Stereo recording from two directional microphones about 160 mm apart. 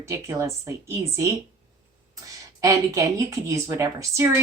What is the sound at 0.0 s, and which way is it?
A woman's voice, 20° right (ahead or behind).